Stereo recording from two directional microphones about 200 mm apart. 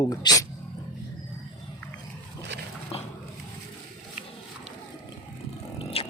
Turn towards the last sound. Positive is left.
turn(degrees=30)  # may be behind; listen again after turning